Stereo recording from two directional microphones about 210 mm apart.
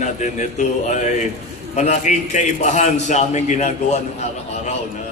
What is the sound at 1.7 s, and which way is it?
A man's voice, 35° left (ahead or behind).